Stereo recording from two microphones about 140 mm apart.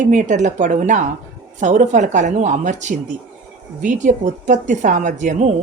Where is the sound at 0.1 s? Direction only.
65° right (ahead or behind).